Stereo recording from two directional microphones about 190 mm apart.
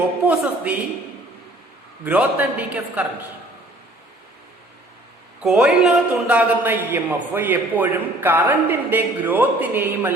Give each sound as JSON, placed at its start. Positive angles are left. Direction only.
{"t": 0.3, "sound": "a man's voice", "side_deg": -10}
{"t": 2.0, "sound": "a man's voice", "side_deg": -10}
{"t": 5.4, "sound": "a man's voice", "side_deg": 0}